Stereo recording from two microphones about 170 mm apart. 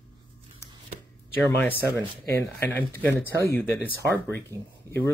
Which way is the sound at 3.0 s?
10° left (ahead or behind).